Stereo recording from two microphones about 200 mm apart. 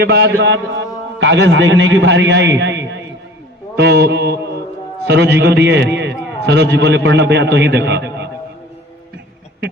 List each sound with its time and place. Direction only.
0.0 s a man's voice: 60° right (ahead or behind)